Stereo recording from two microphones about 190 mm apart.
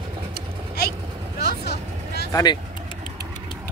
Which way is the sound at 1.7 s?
60° left (ahead or behind).